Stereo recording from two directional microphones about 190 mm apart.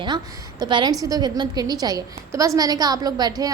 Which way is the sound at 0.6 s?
25° right (ahead or behind).